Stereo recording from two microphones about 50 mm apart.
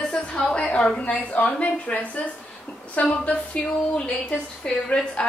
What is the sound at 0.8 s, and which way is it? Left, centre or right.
Speech, centre.